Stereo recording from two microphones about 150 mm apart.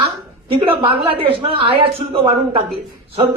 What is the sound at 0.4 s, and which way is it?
A woman's voice, 35° right (ahead or behind).